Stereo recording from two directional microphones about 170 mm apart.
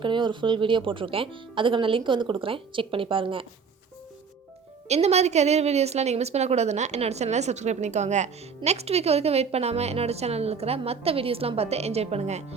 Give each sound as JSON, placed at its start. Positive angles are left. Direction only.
{"t": 0.0, "sound": "speech", "side_deg": -30}
{"t": 4.9, "sound": "a woman's voice", "side_deg": -40}